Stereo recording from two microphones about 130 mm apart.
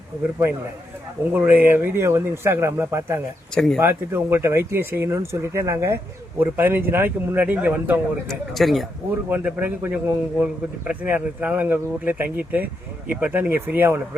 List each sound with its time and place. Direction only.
1.3 s a man's voice: 15° right (ahead or behind)
3.5 s speech: 5° left (ahead or behind)
3.8 s a man's voice: 15° right (ahead or behind)
8.3 s speech: centre (ahead or behind)
9.3 s a man's voice: 10° right (ahead or behind)